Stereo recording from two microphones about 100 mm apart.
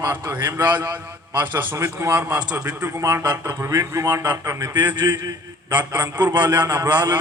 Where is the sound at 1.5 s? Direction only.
20° right (ahead or behind).